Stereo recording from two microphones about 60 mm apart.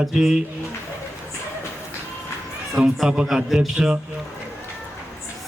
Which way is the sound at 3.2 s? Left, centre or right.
Centre.